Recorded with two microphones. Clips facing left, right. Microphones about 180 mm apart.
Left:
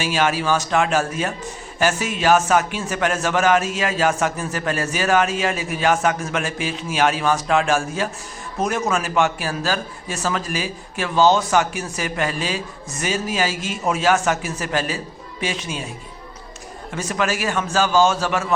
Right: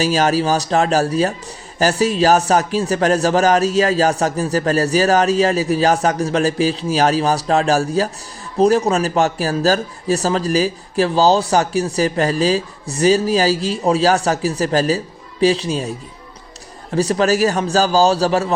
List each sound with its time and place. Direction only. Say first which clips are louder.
0.0 s a man's voice: right 5 dB; 40° right (ahead or behind)